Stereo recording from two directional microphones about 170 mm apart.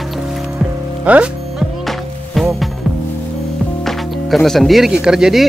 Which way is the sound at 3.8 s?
Centre (ahead or behind).